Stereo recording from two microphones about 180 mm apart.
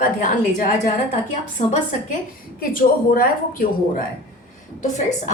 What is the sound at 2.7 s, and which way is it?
A woman's voice, 50° left (ahead or behind).